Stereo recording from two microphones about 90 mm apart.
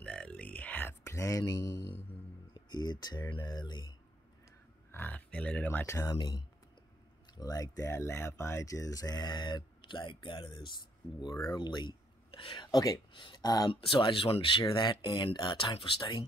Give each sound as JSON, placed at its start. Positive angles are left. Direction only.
{"t": 0.0, "sound": "a sound", "side_deg": 10}
{"t": 2.5, "sound": "speech", "side_deg": 55}
{"t": 4.9, "sound": "pig", "side_deg": 20}
{"t": 5.7, "sound": "speech", "side_deg": 30}
{"t": 6.1, "sound": "speech", "side_deg": 55}
{"t": 7.3, "sound": "speech", "side_deg": 40}
{"t": 13.7, "sound": "speech", "side_deg": 75}
{"t": 14.6, "sound": "speech", "side_deg": 65}